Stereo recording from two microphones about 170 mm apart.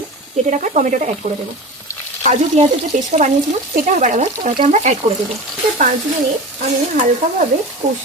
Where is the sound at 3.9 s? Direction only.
50° right (ahead or behind).